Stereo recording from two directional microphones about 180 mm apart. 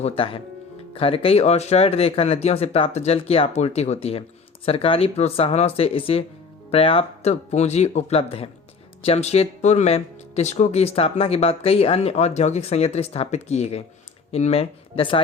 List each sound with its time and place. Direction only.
0.0 s speech: 30° left (ahead or behind)